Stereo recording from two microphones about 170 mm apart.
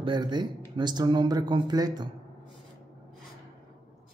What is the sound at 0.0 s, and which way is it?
Speech, 25° right (ahead or behind).